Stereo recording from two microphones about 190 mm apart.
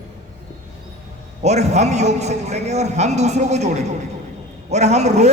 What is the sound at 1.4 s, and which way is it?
A man's voice, 35° right (ahead or behind).